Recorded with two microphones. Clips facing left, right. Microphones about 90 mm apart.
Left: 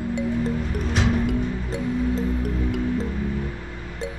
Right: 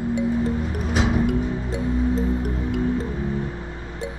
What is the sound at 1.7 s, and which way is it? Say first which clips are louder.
Music: right 1 dB; 70° right (ahead or behind).